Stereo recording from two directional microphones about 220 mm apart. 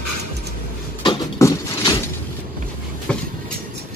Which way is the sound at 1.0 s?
15° left (ahead or behind).